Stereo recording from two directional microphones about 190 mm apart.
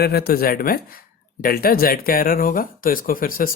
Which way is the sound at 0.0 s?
55° left (ahead or behind).